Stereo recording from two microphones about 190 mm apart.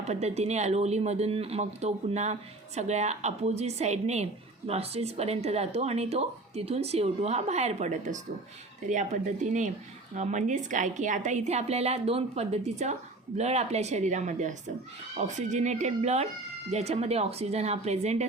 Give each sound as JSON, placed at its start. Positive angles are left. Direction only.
{"t": 0.0, "sound": "speech", "side_deg": -35}